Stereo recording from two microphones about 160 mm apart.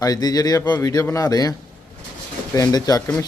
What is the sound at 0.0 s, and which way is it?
A man's voice, 25° left (ahead or behind).